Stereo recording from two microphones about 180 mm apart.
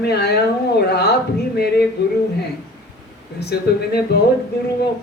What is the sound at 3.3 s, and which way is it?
Speech, 65° left (ahead or behind).